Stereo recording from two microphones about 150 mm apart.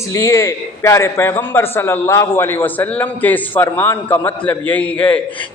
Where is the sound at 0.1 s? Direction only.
20° left (ahead or behind).